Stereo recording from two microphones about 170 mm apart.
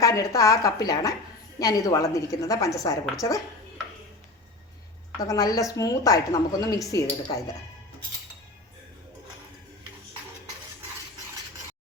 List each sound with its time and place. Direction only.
0.0 s a woman's voice: 20° left (ahead or behind)
5.3 s a woman's voice: 20° left (ahead or behind)